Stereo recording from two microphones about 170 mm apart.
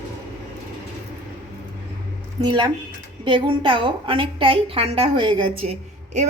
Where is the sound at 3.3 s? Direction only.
30° right (ahead or behind).